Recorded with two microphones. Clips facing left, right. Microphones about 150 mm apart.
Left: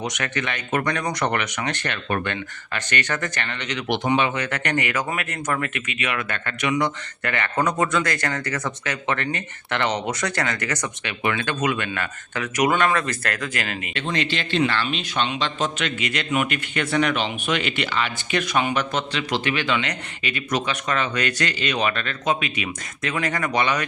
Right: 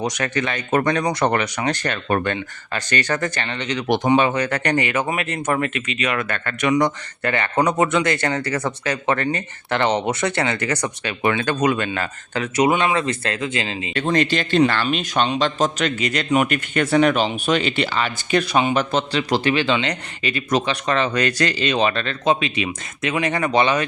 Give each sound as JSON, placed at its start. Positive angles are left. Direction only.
{"t": 0.0, "sound": "a man's voice", "side_deg": -35}
{"t": 13.9, "sound": "a man's voice", "side_deg": -45}